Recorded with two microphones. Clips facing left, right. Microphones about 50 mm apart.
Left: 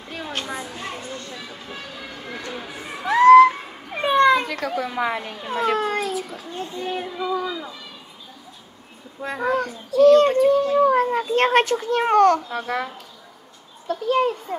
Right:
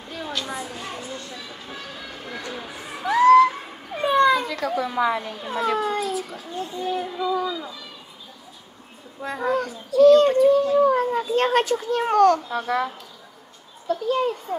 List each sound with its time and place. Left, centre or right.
3.0 s a sound: left
4.9 s speech: left
9.2 s a child's voice: left
9.5 s a child's voice: left
12.5 s a child's voice: left
13.8 s a child's voice: left